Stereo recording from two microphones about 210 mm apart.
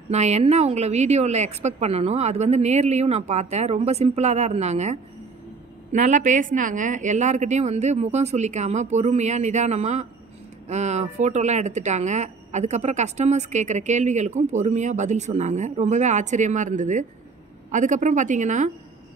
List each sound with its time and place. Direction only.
0.1 s speech: 30° right (ahead or behind)